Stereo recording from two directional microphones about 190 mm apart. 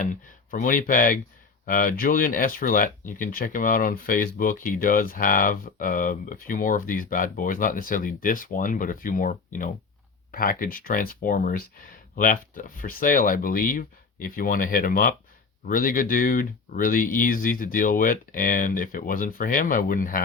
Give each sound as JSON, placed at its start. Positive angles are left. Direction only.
{"t": 0.0, "sound": "speech", "side_deg": 45}